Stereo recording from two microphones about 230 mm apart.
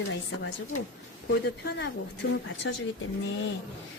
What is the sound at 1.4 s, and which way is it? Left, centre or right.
Speech, left.